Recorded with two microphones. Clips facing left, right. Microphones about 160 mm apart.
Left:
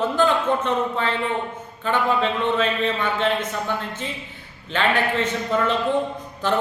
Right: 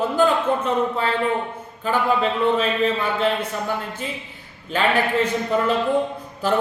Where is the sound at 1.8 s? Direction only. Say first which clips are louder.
Right 1 dB; 5° right (ahead or behind).